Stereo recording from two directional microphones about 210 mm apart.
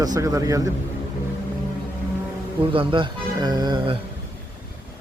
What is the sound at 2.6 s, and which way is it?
Speech, 25° right (ahead or behind).